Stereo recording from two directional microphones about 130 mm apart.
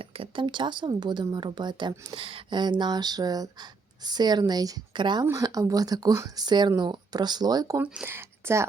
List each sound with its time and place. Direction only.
0.0 s speech: 45° right (ahead or behind)
5.2 s speech: 25° right (ahead or behind)
7.8 s speech: 5° right (ahead or behind)
8.0 s speech: 20° right (ahead or behind)